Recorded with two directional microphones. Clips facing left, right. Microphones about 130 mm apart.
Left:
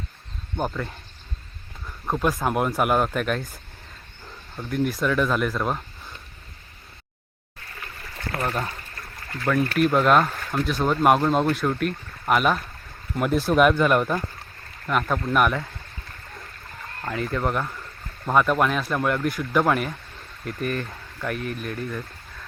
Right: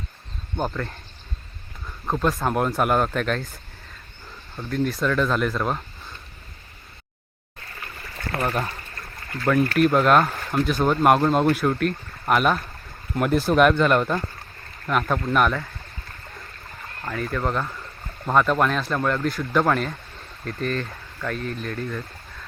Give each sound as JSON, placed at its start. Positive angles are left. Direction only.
{"t": 0.5, "sound": "speech", "side_deg": 5}
{"t": 2.0, "sound": "speech", "side_deg": 5}
{"t": 8.4, "sound": "speech", "side_deg": 0}
{"t": 17.3, "sound": "speech", "side_deg": 15}
{"t": 18.3, "sound": "speech", "side_deg": 5}
{"t": 19.0, "sound": "speech", "side_deg": 15}